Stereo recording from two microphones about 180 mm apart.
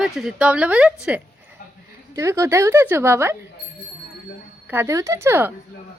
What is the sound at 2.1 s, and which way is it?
A woman's voice, 15° right (ahead or behind).